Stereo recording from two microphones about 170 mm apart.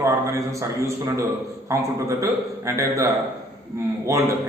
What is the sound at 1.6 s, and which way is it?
A man's voice, 15° right (ahead or behind).